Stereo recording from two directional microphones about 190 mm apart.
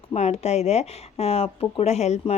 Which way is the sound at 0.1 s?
35° left (ahead or behind).